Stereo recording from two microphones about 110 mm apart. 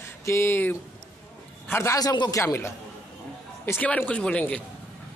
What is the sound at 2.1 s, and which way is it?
Speech, 40° left (ahead or behind).